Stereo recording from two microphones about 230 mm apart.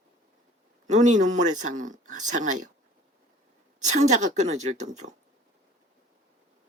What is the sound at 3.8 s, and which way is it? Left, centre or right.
Speech, right.